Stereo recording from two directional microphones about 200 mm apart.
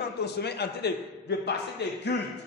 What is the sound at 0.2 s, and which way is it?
A man's voice, 55° left (ahead or behind).